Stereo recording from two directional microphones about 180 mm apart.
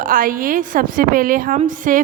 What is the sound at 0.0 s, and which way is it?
A woman's voice, 50° right (ahead or behind).